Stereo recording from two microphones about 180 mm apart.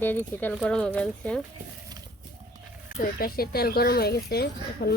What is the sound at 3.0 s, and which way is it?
Speech, 55° left (ahead or behind).